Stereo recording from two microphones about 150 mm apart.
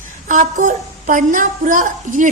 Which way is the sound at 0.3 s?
60° right (ahead or behind).